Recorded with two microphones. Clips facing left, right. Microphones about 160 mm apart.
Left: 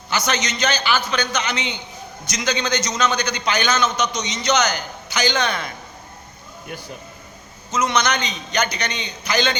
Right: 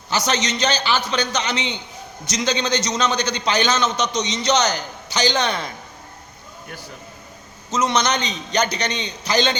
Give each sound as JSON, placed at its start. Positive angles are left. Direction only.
{"t": 0.1, "sound": "a man's voice", "side_deg": -35}
{"t": 7.7, "sound": "a man's voice", "side_deg": -35}